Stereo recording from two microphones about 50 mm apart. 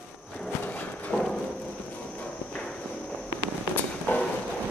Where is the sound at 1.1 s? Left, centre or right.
Left.